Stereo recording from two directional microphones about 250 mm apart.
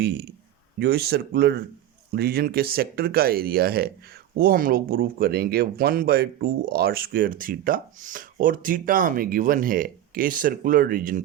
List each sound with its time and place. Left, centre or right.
0.0 s speech: right